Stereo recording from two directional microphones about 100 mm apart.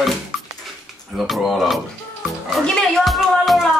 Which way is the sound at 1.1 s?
Centre (ahead or behind).